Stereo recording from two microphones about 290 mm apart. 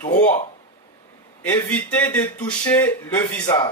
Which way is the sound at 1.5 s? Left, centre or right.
Centre.